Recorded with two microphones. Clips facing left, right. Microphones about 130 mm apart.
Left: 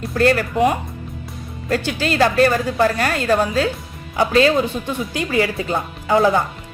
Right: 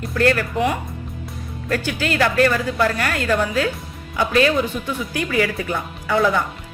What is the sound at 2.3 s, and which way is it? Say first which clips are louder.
Speech: left 2 dB; 25° left (ahead or behind).